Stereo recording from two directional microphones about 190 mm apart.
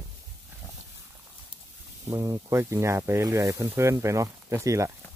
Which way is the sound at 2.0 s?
20° right (ahead or behind).